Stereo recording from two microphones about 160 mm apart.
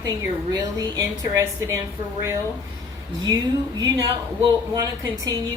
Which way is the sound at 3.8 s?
25° right (ahead or behind).